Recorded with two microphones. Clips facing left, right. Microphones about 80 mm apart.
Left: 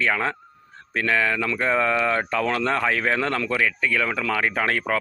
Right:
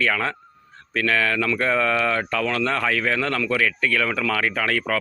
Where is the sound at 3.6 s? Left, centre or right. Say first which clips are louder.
Right 1 dB; centre.